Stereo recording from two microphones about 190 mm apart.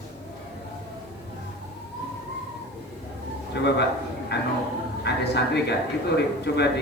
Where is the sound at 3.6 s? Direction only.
65° left (ahead or behind).